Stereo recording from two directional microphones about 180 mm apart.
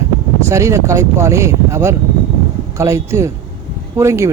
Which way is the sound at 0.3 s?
15° right (ahead or behind).